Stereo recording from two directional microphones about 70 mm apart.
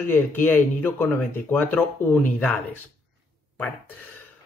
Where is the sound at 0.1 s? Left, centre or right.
Left.